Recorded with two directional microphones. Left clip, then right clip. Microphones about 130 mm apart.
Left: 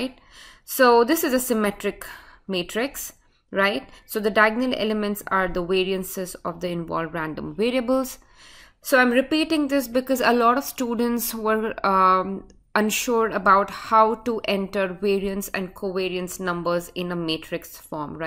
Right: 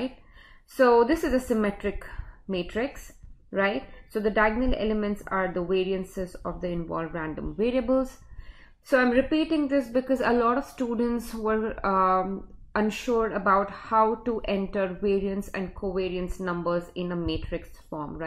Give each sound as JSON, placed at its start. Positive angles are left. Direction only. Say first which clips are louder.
{"t": 0.7, "sound": "a woman's voice", "louder": "left 3 dB", "side_deg": 25}